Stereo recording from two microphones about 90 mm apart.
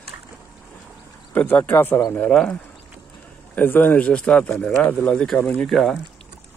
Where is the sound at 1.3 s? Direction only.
20° left (ahead or behind).